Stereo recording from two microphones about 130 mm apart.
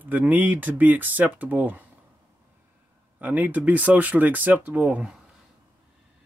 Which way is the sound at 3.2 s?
10° right (ahead or behind).